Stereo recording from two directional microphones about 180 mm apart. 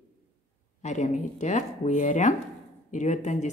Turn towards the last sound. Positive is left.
turn(degrees=40)  # may be behind; listen again after turning